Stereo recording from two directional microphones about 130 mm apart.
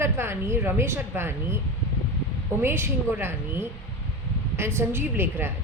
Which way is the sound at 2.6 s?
20° right (ahead or behind).